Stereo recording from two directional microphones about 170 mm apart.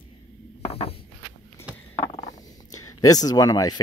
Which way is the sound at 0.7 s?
35° left (ahead or behind).